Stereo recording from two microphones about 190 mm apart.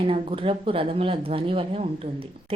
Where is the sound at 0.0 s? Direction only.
30° right (ahead or behind).